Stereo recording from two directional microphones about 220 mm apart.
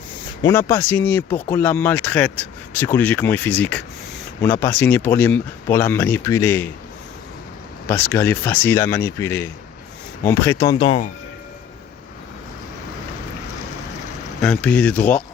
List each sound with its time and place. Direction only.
0.4 s speech: 10° left (ahead or behind)
7.9 s speech: 10° left (ahead or behind)
14.4 s speech: 5° left (ahead or behind)